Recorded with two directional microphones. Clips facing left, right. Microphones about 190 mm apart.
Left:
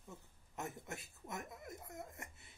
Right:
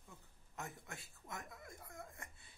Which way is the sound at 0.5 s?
20° left (ahead or behind).